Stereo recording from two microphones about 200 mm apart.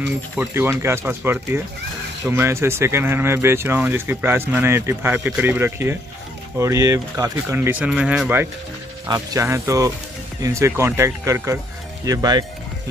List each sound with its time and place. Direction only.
0.4 s speech: 10° right (ahead or behind)
9.0 s speech: 15° right (ahead or behind)